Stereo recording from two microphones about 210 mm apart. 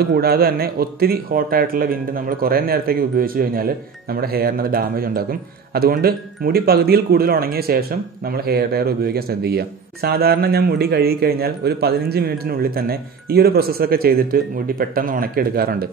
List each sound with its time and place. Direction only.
0.0 s speech: 45° right (ahead or behind)